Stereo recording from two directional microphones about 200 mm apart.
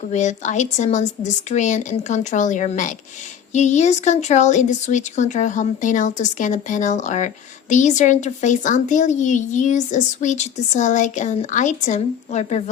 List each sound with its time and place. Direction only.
0.1 s speech: 35° left (ahead or behind)